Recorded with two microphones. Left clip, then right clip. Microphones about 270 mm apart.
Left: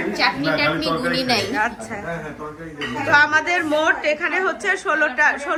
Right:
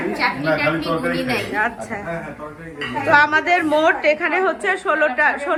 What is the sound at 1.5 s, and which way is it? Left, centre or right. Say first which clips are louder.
Speech: right 1 dB; centre.